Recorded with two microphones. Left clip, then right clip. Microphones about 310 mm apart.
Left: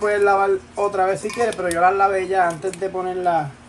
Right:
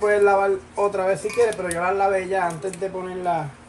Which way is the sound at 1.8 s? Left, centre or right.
Left.